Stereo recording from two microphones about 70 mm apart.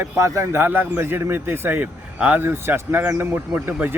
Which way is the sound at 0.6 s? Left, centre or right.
Right.